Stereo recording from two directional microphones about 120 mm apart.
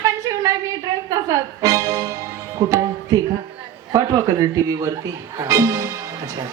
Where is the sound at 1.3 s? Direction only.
30° right (ahead or behind).